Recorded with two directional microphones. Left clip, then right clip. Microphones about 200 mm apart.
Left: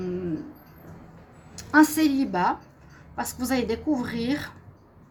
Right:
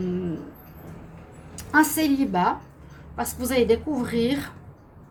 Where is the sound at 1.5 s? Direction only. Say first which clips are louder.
Left 1 dB; 45° left (ahead or behind).